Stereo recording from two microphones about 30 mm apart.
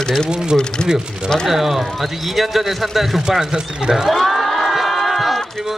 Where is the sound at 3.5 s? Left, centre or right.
Right.